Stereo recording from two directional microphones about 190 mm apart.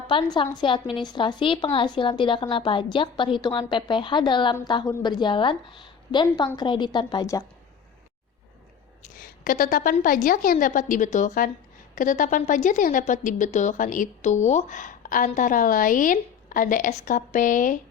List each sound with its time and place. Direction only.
0.1 s speech: 25° left (ahead or behind)
9.2 s a woman's voice: 45° left (ahead or behind)